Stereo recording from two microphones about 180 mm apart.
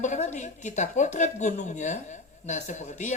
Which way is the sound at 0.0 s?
40° left (ahead or behind).